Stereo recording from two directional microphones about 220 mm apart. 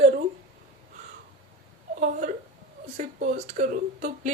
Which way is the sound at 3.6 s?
35° right (ahead or behind).